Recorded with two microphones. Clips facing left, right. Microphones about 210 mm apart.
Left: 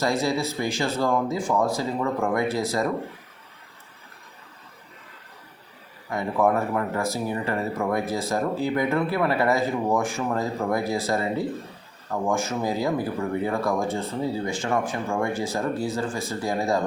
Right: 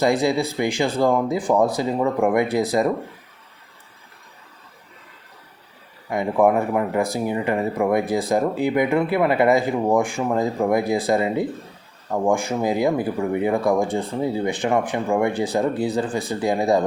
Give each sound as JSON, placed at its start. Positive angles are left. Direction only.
{"t": 0.0, "sound": "speech", "side_deg": -15}
{"t": 6.4, "sound": "speech", "side_deg": -15}